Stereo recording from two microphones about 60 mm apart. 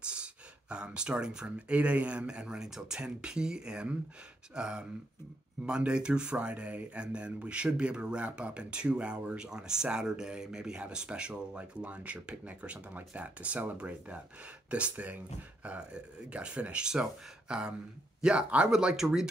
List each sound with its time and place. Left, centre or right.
0.0 s speech: centre